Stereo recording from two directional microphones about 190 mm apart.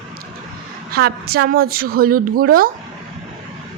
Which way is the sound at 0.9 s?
55° right (ahead or behind).